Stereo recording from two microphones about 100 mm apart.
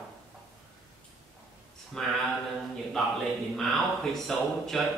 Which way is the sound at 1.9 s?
5° left (ahead or behind).